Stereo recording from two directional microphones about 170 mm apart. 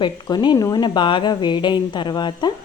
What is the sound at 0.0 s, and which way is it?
Speech, 25° left (ahead or behind).